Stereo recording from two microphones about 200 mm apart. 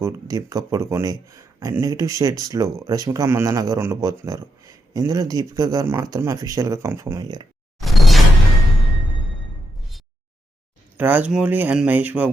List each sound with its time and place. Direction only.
0.0 s speech: 20° right (ahead or behind)
7.8 s a sound: centre (ahead or behind)
10.9 s speech: 10° right (ahead or behind)